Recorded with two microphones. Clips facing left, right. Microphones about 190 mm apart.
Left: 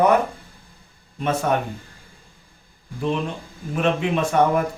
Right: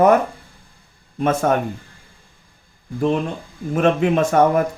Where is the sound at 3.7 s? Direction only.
45° right (ahead or behind).